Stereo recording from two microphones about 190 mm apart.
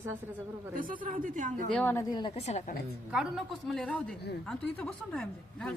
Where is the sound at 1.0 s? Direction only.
45° right (ahead or behind).